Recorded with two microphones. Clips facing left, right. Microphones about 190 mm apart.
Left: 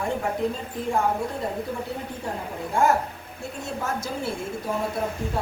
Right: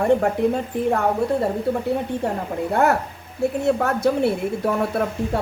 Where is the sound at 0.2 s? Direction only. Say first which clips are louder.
Right 6 dB; 65° right (ahead or behind).